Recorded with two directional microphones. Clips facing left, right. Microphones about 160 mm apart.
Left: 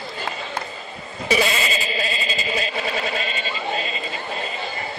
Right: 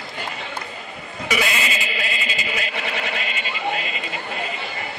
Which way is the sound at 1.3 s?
30° left (ahead or behind).